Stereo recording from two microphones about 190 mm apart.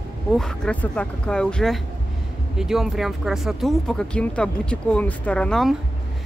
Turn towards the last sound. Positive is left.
turn(degrees=5)  # may be behind; listen again after turning